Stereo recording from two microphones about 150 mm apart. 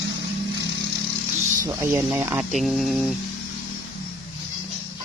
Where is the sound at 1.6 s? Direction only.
20° right (ahead or behind).